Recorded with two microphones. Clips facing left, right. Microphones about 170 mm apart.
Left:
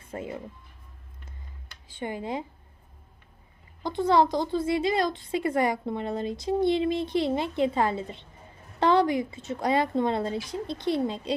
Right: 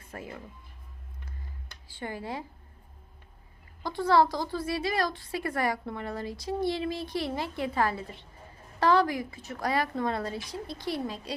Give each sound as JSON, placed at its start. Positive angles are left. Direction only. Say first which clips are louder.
{"t": 0.1, "sound": "a woman's voice", "louder": "left 6 dB", "side_deg": 20}
{"t": 1.9, "sound": "a woman's voice", "louder": "left 4 dB", "side_deg": 20}
{"t": 3.8, "sound": "a woman's voice", "louder": "left 2 dB", "side_deg": 20}